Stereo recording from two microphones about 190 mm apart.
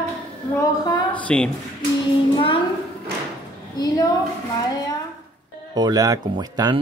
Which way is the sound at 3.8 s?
20° left (ahead or behind).